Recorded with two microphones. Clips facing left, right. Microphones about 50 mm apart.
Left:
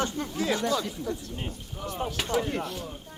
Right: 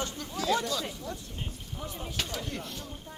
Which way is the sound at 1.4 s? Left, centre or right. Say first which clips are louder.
Left 4 dB; left.